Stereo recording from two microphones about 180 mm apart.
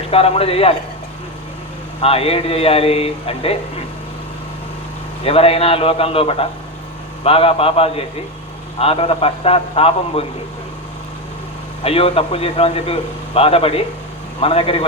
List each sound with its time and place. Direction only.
0.1 s a man's voice: 35° left (ahead or behind)
2.0 s a man's voice: 35° left (ahead or behind)
5.2 s a man's voice: 35° left (ahead or behind)
11.8 s a man's voice: 35° left (ahead or behind)